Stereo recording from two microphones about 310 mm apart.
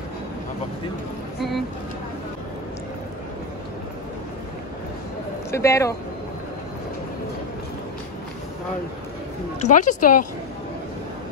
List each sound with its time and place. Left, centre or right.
5.5 s speech: centre
9.6 s speech: left